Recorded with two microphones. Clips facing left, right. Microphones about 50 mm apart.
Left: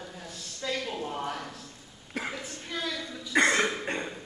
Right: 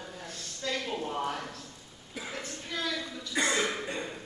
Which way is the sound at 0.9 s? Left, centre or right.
Centre.